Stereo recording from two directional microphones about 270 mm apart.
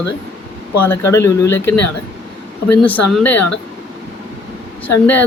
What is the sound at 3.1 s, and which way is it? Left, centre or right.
Speech, centre.